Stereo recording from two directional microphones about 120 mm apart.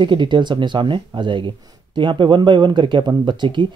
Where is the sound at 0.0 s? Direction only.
40° right (ahead or behind).